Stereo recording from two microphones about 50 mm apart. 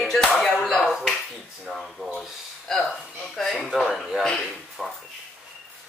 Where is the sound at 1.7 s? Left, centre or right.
Centre.